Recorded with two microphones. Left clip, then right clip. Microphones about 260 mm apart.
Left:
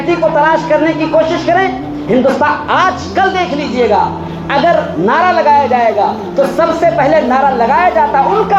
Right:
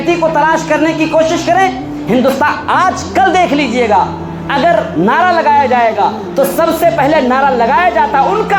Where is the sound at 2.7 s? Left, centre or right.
Right.